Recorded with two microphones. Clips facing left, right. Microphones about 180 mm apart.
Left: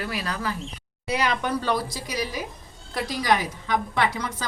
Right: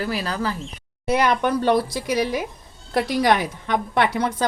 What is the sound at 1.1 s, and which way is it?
A woman's voice, 55° right (ahead or behind).